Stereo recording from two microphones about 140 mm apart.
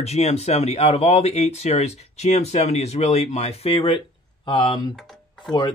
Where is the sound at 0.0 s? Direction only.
50° left (ahead or behind).